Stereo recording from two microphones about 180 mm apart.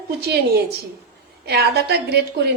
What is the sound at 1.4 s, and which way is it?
A woman's voice, 65° right (ahead or behind).